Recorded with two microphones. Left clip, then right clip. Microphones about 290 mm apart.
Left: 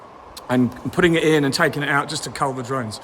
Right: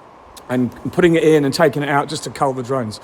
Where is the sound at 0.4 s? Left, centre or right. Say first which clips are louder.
Even; centre.